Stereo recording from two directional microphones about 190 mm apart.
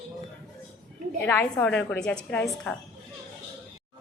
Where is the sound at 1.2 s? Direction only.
10° left (ahead or behind).